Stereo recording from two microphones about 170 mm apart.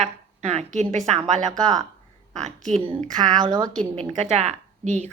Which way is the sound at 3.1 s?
25° right (ahead or behind).